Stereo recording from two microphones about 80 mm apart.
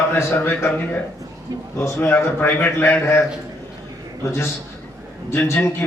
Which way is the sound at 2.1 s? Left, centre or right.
Left.